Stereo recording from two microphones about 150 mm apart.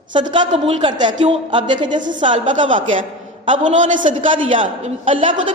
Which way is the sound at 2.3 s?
55° right (ahead or behind).